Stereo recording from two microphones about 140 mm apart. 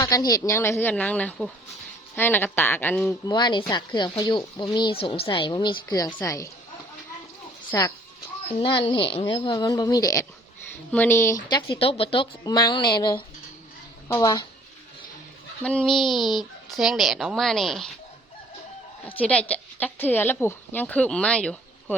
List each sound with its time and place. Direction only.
0.0 s speech: 25° left (ahead or behind)
3.2 s speech: 30° left (ahead or behind)
7.7 s speech: 25° left (ahead or behind)
8.5 s speech: 40° left (ahead or behind)
10.9 s speech: 15° left (ahead or behind)
11.4 s speech: 35° left (ahead or behind)
12.5 s speech: 30° left (ahead or behind)
15.6 s speech: 5° left (ahead or behind)
19.0 s speech: 10° left (ahead or behind)